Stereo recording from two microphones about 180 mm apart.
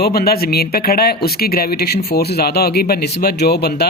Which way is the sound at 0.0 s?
60° left (ahead or behind).